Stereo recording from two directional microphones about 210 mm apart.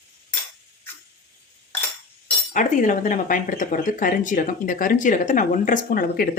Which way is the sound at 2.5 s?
40° left (ahead or behind).